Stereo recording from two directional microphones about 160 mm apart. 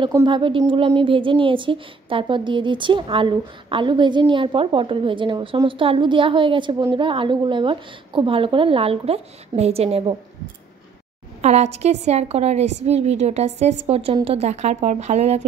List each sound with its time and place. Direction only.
0.2 s a woman's voice: 30° right (ahead or behind)
11.4 s a woman's voice: 45° right (ahead or behind)